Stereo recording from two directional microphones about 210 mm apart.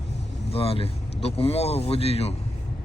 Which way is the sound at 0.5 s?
25° left (ahead or behind).